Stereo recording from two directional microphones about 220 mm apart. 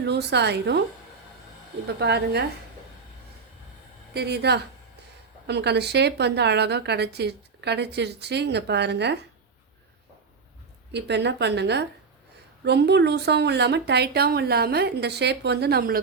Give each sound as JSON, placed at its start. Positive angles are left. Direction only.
{"t": 0.0, "sound": "a woman's voice", "side_deg": -50}
{"t": 2.0, "sound": "a woman's voice", "side_deg": -50}
{"t": 4.1, "sound": "a woman's voice", "side_deg": -50}
{"t": 10.9, "sound": "a woman's voice", "side_deg": -50}